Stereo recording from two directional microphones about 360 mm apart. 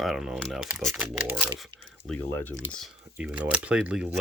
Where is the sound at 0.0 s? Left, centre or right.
Centre.